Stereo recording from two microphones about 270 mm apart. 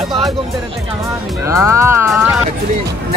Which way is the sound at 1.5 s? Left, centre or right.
Centre.